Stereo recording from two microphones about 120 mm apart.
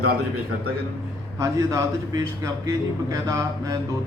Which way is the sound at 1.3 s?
25° right (ahead or behind).